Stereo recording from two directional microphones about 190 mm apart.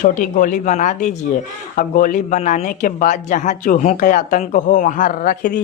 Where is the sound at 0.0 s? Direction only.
45° left (ahead or behind).